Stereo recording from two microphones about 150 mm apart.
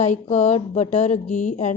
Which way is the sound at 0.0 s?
50° left (ahead or behind).